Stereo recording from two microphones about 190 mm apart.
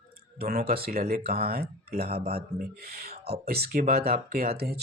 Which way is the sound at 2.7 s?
55° right (ahead or behind).